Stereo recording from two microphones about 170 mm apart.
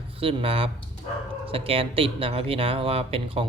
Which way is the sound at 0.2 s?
35° right (ahead or behind).